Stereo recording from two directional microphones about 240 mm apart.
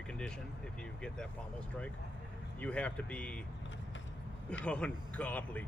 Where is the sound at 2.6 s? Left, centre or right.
Centre.